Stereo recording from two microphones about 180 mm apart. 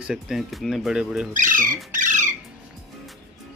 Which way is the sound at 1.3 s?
50° right (ahead or behind).